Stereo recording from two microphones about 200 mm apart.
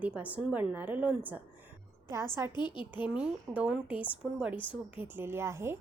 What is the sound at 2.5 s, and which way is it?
Speech, 25° left (ahead or behind).